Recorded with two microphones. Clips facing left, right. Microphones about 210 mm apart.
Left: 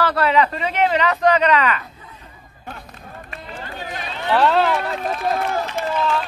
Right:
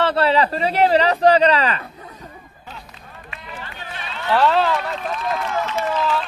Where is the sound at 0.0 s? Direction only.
30° right (ahead or behind).